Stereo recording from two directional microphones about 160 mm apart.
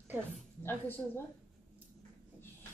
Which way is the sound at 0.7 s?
15° left (ahead or behind).